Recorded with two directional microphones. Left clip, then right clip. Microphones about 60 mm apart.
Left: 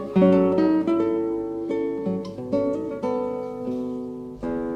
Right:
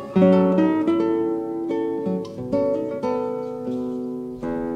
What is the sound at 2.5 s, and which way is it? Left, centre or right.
Guitar, left.